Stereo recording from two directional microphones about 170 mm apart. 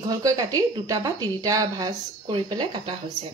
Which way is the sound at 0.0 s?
20° right (ahead or behind).